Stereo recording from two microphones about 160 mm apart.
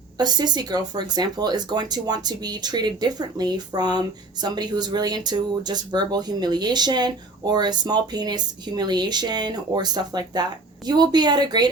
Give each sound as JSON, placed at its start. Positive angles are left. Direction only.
{"t": 0.2, "sound": "speech", "side_deg": -25}